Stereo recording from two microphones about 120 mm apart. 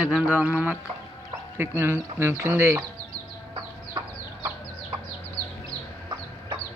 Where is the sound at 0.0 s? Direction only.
10° right (ahead or behind).